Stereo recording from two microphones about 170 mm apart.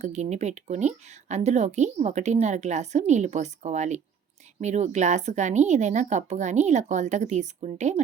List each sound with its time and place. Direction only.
0.0 s speech: 40° right (ahead or behind)